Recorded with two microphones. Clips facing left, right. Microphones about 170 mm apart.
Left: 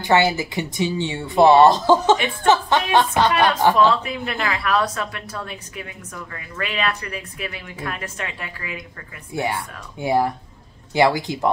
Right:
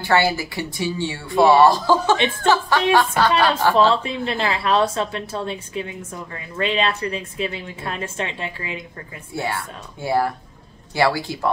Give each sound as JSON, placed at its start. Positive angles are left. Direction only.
{"t": 0.0, "sound": "speech", "side_deg": 20}
{"t": 3.9, "sound": "a woman's voice", "side_deg": -25}
{"t": 9.3, "sound": "speech", "side_deg": 20}